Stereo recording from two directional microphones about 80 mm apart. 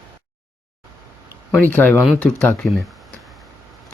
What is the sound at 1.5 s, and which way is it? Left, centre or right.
A man's voice, left.